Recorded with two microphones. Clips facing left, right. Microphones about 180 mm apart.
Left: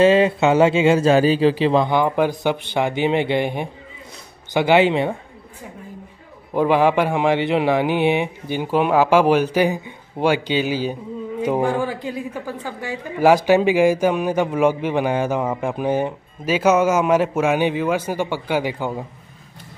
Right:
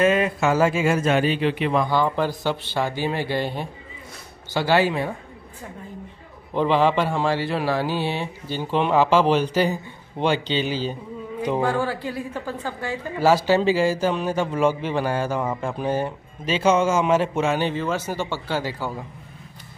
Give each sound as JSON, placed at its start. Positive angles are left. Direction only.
{"t": 0.0, "sound": "speech", "side_deg": 30}
{"t": 6.5, "sound": "a woman's voice", "side_deg": 10}